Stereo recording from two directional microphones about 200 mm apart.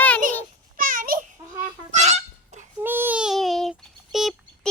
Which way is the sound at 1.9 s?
35° right (ahead or behind).